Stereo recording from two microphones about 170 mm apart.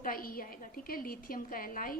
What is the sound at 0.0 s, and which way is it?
A woman's voice, 55° left (ahead or behind).